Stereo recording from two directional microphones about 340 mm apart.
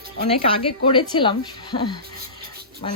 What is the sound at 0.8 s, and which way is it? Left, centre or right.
Speech, centre.